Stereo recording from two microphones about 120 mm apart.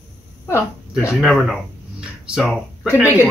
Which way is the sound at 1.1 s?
Centre (ahead or behind).